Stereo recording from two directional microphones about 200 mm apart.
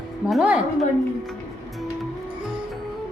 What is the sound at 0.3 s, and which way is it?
Speech, 5° right (ahead or behind).